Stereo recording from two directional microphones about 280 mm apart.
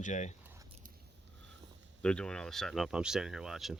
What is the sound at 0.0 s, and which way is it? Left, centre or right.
Speech, left.